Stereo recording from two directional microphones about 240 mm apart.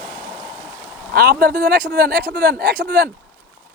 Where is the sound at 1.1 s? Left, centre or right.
Right.